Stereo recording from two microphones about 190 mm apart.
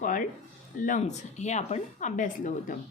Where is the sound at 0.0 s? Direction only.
45° left (ahead or behind).